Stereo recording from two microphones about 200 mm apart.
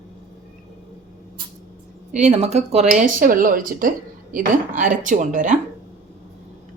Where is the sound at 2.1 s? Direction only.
35° right (ahead or behind).